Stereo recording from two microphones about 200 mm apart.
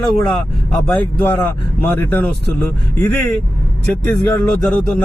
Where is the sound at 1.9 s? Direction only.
5° left (ahead or behind).